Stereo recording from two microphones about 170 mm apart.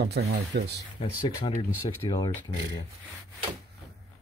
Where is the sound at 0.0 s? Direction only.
70° right (ahead or behind).